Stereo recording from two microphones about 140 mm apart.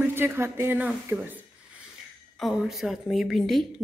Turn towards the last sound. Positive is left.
turn(degrees=0)  # may be behind; listen again after turning